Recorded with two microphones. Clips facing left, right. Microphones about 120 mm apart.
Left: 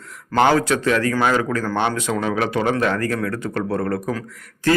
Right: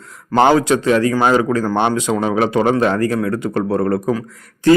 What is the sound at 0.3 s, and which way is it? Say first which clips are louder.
Speech: right 4 dB; 20° right (ahead or behind).